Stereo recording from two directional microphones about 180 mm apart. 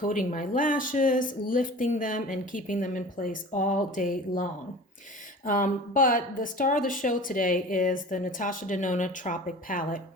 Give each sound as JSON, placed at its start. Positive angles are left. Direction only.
{"t": 0.0, "sound": "a woman's voice", "side_deg": 45}
{"t": 5.5, "sound": "a woman's voice", "side_deg": 50}